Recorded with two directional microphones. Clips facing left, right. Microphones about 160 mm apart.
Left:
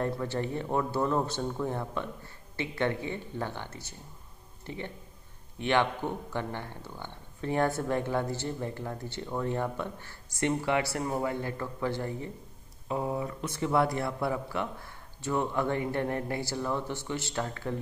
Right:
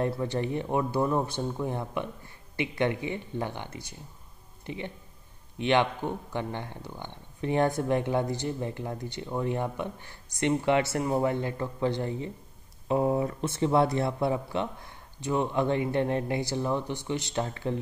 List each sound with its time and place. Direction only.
0.0 s speech: 20° right (ahead or behind)